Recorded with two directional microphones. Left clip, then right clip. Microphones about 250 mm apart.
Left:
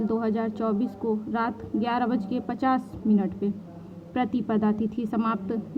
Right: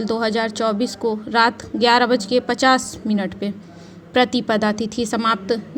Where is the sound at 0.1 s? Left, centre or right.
Centre.